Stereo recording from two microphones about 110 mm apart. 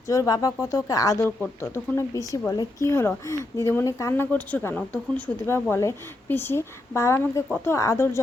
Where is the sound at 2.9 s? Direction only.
25° left (ahead or behind).